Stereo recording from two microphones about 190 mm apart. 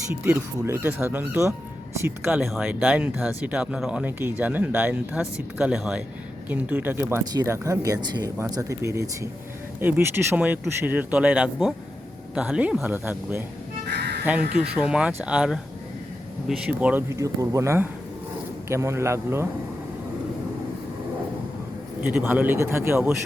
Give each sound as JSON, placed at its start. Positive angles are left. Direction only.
{"t": 0.1, "sound": "speech", "side_deg": -10}
{"t": 2.4, "sound": "speech", "side_deg": 0}
{"t": 13.9, "sound": "crow", "side_deg": -60}
{"t": 14.5, "sound": "speech", "side_deg": -5}
{"t": 22.0, "sound": "speech", "side_deg": -10}